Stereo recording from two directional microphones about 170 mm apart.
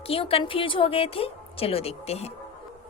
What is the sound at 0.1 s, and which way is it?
A woman's voice, 35° left (ahead or behind).